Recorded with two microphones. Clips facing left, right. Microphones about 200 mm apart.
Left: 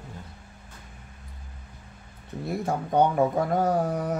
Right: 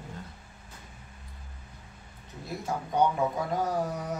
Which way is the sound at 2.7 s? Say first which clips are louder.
Left 3 dB; 55° left (ahead or behind).